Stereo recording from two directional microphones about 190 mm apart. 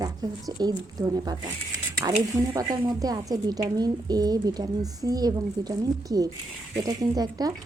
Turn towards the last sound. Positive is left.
turn(degrees=-20)  # may be behind; listen again after turning